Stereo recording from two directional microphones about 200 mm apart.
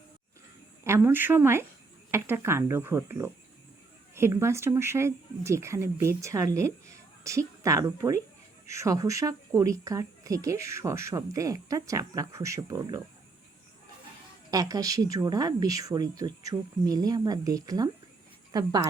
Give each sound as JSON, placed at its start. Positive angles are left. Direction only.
{"t": 0.9, "sound": "a woman's voice", "side_deg": -10}
{"t": 14.5, "sound": "a woman's voice", "side_deg": -15}